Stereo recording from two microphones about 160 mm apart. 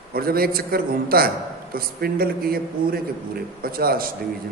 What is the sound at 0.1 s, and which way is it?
A man's voice, 70° right (ahead or behind).